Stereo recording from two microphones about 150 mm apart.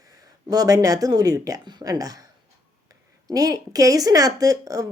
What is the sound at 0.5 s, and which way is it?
A woman's voice, 25° right (ahead or behind).